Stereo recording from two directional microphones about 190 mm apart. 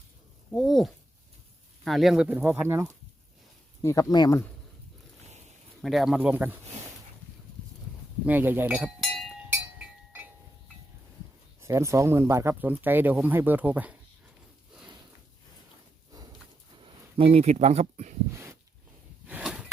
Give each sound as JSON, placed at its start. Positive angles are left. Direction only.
{"t": 0.5, "sound": "speech", "side_deg": 0}
{"t": 3.8, "sound": "speech", "side_deg": 20}
{"t": 5.8, "sound": "speech", "side_deg": 0}
{"t": 8.3, "sound": "speech", "side_deg": -10}
{"t": 9.5, "sound": "chink", "side_deg": -5}
{"t": 11.6, "sound": "speech", "side_deg": -15}
{"t": 16.8, "sound": "speech", "side_deg": -30}
{"t": 19.3, "sound": "a sound", "side_deg": -5}